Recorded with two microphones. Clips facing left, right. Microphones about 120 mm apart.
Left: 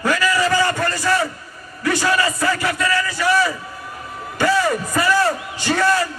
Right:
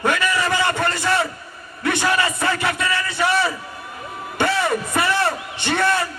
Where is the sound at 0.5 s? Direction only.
25° right (ahead or behind).